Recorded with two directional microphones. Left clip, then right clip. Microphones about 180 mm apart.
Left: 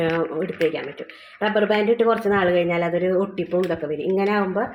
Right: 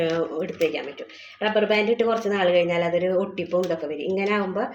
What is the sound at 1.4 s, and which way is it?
Speech, 5° left (ahead or behind).